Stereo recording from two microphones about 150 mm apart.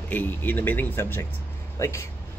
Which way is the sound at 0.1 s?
10° left (ahead or behind).